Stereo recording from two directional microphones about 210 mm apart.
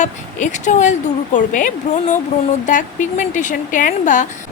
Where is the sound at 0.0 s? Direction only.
35° left (ahead or behind).